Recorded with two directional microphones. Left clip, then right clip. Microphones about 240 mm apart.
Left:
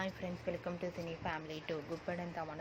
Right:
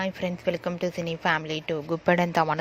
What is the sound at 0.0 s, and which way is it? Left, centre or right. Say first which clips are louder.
Speech: right 13 dB; right.